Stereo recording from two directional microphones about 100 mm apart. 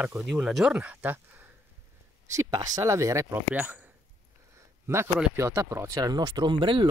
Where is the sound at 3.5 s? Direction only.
15° right (ahead or behind).